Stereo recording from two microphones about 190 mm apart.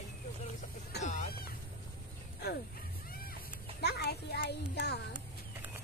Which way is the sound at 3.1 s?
50° left (ahead or behind).